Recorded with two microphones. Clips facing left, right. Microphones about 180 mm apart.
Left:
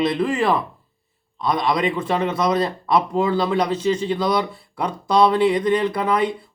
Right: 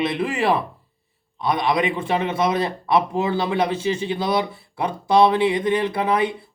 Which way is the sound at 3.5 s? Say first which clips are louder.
Left 2 dB; 25° right (ahead or behind).